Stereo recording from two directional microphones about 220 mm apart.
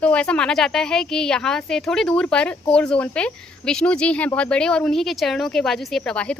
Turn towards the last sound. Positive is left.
turn(degrees=5)  # may be behind; listen again after turning